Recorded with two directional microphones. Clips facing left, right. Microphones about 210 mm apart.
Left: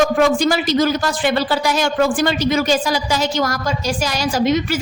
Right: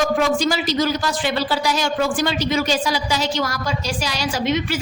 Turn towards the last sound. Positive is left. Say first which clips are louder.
# left 4 dB
turn(degrees=40)  # may be behind; listen again after turning